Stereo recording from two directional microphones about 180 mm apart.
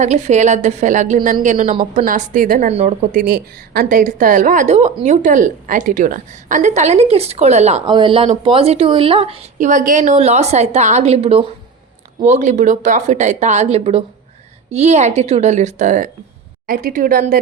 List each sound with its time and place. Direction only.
0.0 s a woman's voice: 40° right (ahead or behind)
7.9 s speech: 25° right (ahead or behind); by 16.0 s 45° right (ahead or behind)
16.6 s a woman's voice: 55° right (ahead or behind)